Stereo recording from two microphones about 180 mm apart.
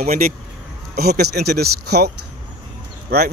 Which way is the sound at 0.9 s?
60° right (ahead or behind).